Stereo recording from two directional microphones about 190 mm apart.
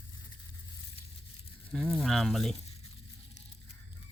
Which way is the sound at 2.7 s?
30° left (ahead or behind).